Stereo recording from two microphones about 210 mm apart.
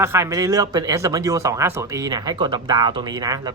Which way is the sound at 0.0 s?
10° right (ahead or behind).